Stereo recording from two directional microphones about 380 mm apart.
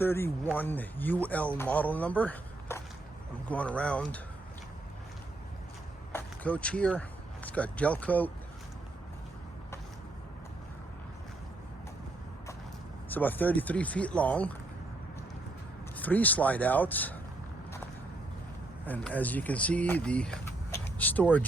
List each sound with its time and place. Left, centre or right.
0.0 s speech: centre
6.1 s speech: centre
13.1 s speech: centre
16.0 s speech: centre
18.9 s speech: centre